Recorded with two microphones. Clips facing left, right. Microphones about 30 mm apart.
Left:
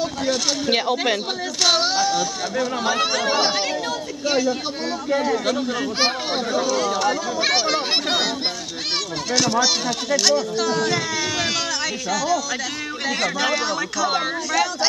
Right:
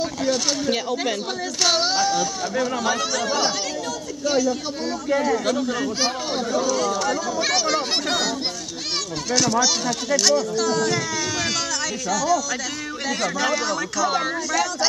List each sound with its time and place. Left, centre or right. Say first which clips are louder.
0.2 s speech: right 1 dB; centre
0.7 s speech: left 3 dB; left
1.6 s a child's voice: left 1 dB; centre
3.0 s speech: left 3 dB; left
5.1 s speech: even; centre
5.9 s speech: left 2 dB; left
9.3 s speech: left 1 dB; centre